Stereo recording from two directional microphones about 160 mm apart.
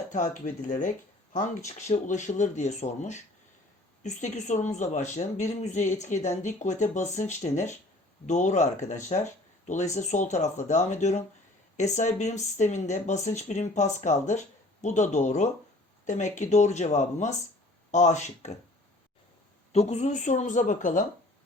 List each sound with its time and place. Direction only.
0.1 s speech: 50° left (ahead or behind)
19.7 s speech: 45° left (ahead or behind)